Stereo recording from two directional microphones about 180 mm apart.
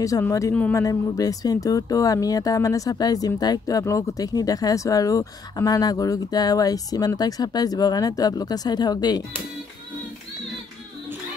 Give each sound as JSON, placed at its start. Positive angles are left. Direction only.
{"t": 0.0, "sound": "a woman's voice", "side_deg": 20}